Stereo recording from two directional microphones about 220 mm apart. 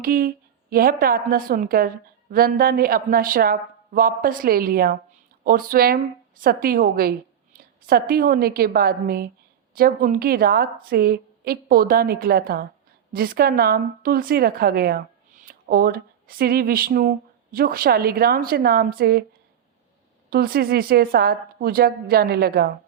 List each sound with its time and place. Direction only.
0.0 s a woman's voice: 40° right (ahead or behind)
20.3 s a woman's voice: 45° right (ahead or behind)